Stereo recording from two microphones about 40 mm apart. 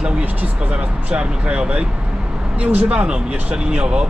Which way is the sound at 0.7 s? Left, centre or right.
Right.